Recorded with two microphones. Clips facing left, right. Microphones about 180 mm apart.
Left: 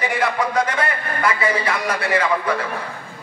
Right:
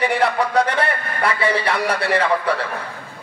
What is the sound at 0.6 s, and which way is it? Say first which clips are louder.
A man's voice: right 2 dB; 65° right (ahead or behind).